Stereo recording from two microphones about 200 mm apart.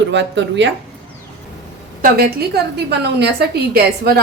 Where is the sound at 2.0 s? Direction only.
50° right (ahead or behind).